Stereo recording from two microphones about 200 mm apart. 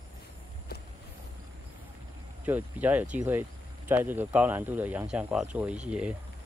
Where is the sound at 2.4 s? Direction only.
10° right (ahead or behind).